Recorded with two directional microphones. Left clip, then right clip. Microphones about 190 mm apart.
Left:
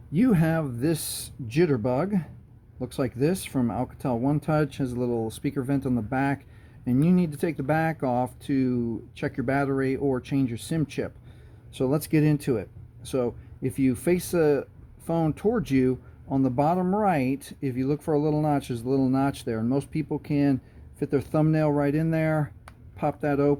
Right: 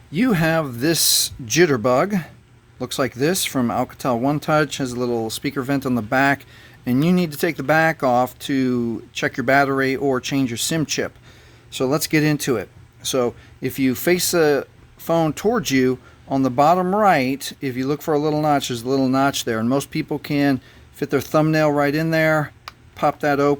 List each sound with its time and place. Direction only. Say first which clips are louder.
0.1 s speech: right 6 dB; 5° right (ahead or behind)